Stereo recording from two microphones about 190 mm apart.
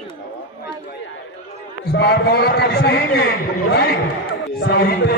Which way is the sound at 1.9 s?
60° left (ahead or behind).